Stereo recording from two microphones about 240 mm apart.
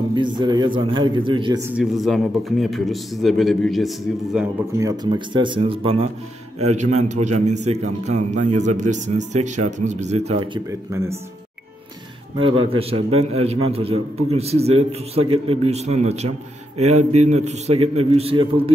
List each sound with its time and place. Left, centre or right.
0.1 s a man's voice: centre
1.8 s a man's voice: centre
4.7 s a man's voice: centre
12.4 s a man's voice: right